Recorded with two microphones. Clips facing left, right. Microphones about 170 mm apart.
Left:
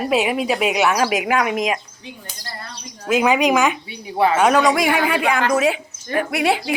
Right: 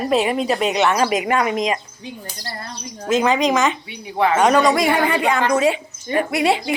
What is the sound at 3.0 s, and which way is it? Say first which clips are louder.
A woman's voice: left 1 dB; 10° left (ahead or behind).